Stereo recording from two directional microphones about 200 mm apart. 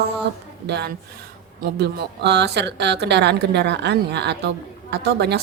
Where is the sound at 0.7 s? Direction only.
55° right (ahead or behind).